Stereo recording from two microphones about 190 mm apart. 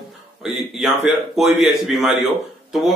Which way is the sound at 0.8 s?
Centre (ahead or behind).